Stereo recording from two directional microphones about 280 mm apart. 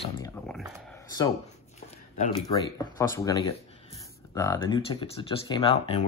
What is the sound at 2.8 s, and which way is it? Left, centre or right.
Speech, centre.